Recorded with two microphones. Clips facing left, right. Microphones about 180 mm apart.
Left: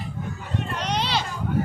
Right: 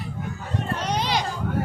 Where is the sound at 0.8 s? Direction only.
10° right (ahead or behind).